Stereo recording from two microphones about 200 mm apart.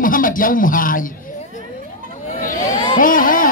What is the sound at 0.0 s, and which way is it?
Speech, 45° left (ahead or behind).